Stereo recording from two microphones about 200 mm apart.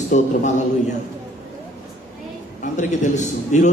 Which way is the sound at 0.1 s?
35° left (ahead or behind).